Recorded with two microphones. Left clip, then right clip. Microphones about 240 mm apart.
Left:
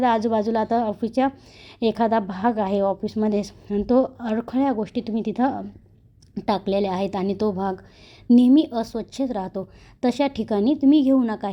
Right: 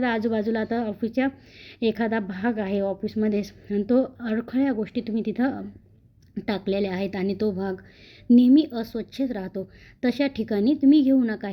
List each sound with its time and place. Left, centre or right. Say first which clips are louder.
0.0 s a woman's voice: left 5 dB; left